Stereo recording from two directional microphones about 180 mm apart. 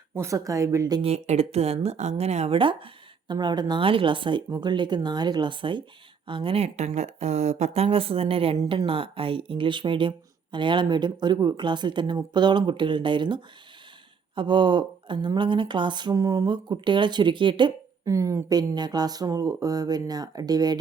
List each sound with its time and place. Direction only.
0.1 s speech: 15° right (ahead or behind)
1.0 s speech: 35° right (ahead or behind)
8.5 s speech: 20° right (ahead or behind)